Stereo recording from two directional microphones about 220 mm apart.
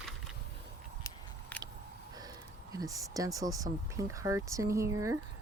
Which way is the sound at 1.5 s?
5° left (ahead or behind).